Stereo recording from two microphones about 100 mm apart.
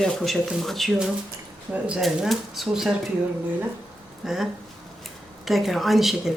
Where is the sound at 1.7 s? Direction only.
10° right (ahead or behind).